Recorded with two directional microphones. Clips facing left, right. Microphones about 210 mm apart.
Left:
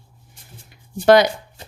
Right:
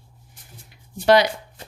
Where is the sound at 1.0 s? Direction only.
50° left (ahead or behind).